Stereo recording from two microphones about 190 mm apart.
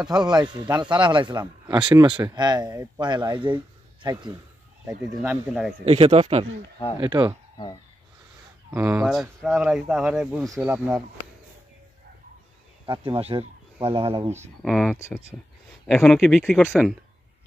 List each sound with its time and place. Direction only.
0.2 s a man's voice: 20° right (ahead or behind)
5.9 s a man's voice: 30° right (ahead or behind)
8.6 s speech: 15° right (ahead or behind)
9.0 s speech: centre (ahead or behind)
12.8 s speech: 25° right (ahead or behind)
14.6 s speech: centre (ahead or behind)